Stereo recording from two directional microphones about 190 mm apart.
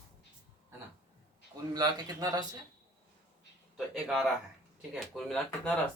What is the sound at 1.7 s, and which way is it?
Speech, 20° right (ahead or behind).